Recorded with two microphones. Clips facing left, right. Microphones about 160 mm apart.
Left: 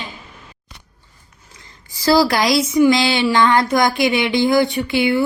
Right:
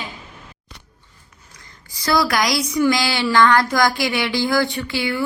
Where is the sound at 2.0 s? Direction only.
25° left (ahead or behind).